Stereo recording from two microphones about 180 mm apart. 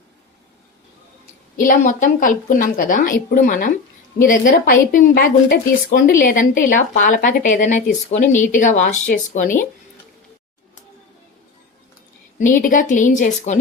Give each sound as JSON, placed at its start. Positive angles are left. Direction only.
{"t": 1.5, "sound": "a woman's voice", "side_deg": 45}
{"t": 12.6, "sound": "a woman's voice", "side_deg": 45}